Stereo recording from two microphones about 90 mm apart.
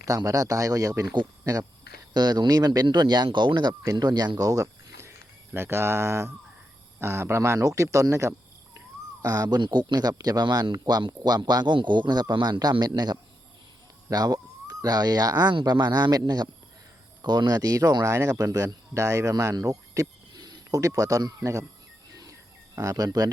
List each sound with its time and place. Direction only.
0.2 s a man's voice: 40° right (ahead or behind)
9.6 s a man's voice: 55° right (ahead or behind); by 21.7 s 35° right (ahead or behind)
22.1 s bird: 40° right (ahead or behind)